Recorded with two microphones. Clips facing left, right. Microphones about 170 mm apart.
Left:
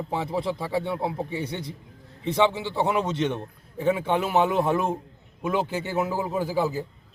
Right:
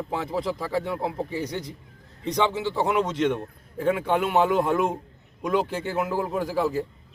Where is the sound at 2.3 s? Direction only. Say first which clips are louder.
Left 1 dB; 10° left (ahead or behind).